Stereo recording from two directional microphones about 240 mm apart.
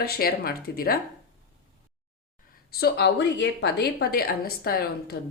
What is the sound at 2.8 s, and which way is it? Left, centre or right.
Speech, left.